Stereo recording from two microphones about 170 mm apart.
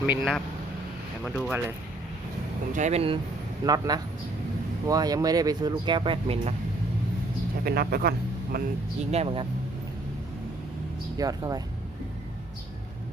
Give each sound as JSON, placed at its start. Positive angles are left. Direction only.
{"t": 0.0, "sound": "speech", "side_deg": -10}
{"t": 1.4, "sound": "speech", "side_deg": -10}
{"t": 2.7, "sound": "speech", "side_deg": -40}
{"t": 3.7, "sound": "speech", "side_deg": -20}
{"t": 7.6, "sound": "a man's voice", "side_deg": -65}
{"t": 9.1, "sound": "speech", "side_deg": -35}
{"t": 11.2, "sound": "speech", "side_deg": -20}